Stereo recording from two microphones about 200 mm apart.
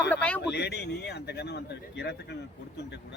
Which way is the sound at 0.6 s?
55° left (ahead or behind).